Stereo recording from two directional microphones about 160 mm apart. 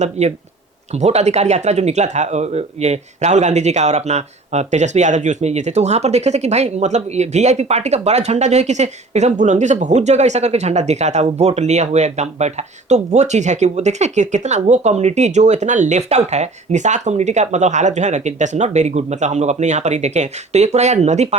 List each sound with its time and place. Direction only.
0.0 s speech: 45° right (ahead or behind)